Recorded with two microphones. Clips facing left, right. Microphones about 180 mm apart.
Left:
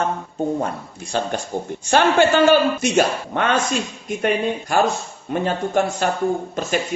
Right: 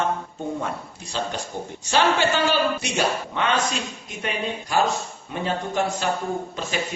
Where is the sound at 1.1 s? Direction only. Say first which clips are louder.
Left 5 dB; 50° left (ahead or behind).